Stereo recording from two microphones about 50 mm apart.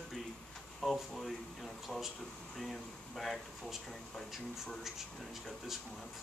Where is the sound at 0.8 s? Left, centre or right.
Centre.